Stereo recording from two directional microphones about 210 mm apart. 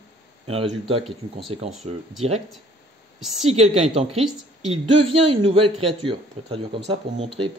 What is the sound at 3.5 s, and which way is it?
Speech, 30° right (ahead or behind).